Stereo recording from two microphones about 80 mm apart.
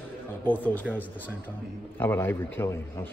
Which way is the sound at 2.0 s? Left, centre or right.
Left.